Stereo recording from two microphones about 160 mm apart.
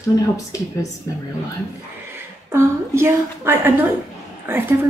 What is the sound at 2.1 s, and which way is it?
A woman's voice, 15° right (ahead or behind).